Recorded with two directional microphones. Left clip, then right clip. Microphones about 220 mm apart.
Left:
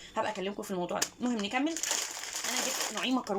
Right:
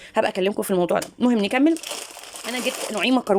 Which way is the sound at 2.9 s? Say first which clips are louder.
Right 15 dB; 50° right (ahead or behind).